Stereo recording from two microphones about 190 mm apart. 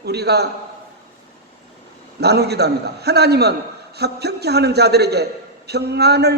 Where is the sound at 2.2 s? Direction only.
60° right (ahead or behind).